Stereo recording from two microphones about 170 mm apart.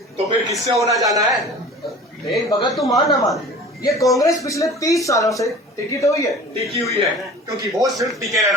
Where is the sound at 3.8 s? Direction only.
20° left (ahead or behind).